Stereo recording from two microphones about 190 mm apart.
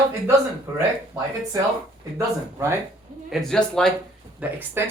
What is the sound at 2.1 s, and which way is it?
Speech, 15° right (ahead or behind).